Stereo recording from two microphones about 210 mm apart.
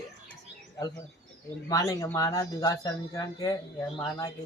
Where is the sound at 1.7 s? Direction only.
15° left (ahead or behind).